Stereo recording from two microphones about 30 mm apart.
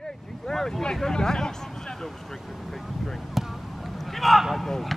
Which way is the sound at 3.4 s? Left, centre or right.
Centre.